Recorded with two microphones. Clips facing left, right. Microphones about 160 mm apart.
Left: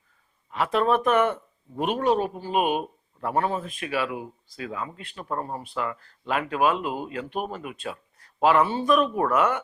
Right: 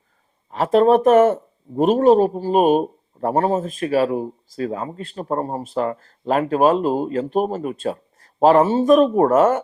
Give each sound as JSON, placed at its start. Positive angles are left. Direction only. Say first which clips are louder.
{"t": 0.5, "sound": "speech", "louder": "right 8 dB", "side_deg": -40}